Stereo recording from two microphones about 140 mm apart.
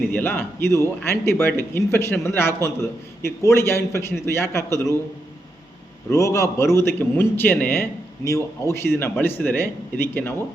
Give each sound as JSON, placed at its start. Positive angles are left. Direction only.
{"t": 0.1, "sound": "a man's voice", "side_deg": 15}
{"t": 6.1, "sound": "a man's voice", "side_deg": 20}